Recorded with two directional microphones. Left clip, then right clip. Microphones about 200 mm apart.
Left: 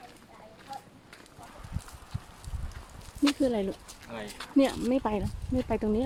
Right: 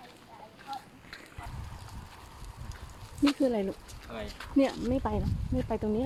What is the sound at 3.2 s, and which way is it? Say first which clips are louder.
Speech: even; 5° left (ahead or behind).